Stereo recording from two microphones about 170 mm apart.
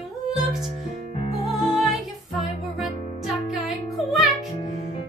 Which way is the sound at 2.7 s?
Centre (ahead or behind).